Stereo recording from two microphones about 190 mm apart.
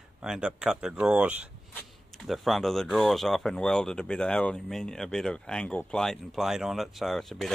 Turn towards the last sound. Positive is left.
turn(degrees=0)  # may be behind; listen again after turning